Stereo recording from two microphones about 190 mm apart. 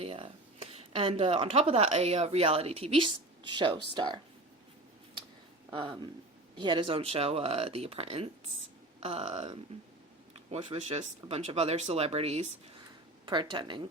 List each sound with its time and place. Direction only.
0.0 s speech: 30° right (ahead or behind)
5.7 s speech: 30° right (ahead or behind)